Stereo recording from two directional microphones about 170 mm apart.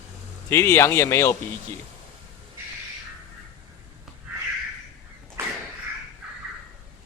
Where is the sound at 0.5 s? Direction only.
15° left (ahead or behind).